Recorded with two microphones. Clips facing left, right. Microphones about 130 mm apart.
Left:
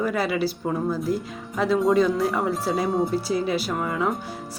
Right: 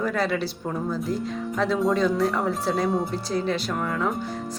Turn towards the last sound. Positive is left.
turn(degrees=5)  # may be behind; listen again after turning